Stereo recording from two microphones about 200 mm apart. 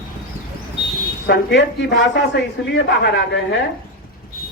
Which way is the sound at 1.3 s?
55° left (ahead or behind).